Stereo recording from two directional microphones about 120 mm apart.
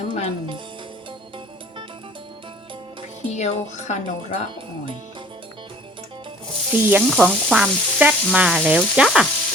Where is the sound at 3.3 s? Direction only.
70° left (ahead or behind).